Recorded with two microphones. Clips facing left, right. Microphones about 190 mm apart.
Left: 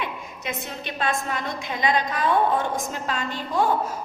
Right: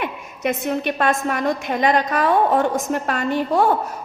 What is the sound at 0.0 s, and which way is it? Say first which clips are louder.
A woman's voice: right 7 dB; 55° right (ahead or behind).